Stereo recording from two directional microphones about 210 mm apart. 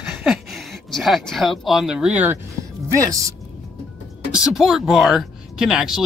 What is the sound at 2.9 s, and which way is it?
Speech, 15° right (ahead or behind).